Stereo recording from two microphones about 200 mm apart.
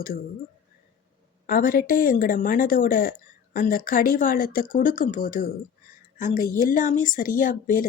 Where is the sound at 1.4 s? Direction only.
45° left (ahead or behind).